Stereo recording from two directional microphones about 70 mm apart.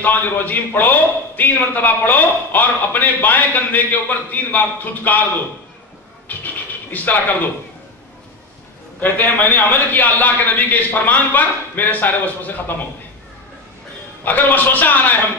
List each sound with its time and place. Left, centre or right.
0.0 s a man's voice: left
6.2 s a sound: left
9.0 s a man's voice: left
14.2 s a man's voice: left